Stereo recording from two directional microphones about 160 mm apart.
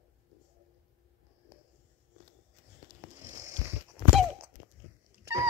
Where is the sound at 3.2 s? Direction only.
20° right (ahead or behind).